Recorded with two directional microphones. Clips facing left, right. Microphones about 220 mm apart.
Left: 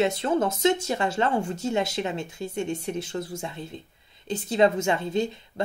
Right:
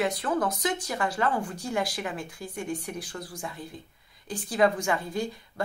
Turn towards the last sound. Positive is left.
turn(degrees=25)  # may be behind; listen again after turning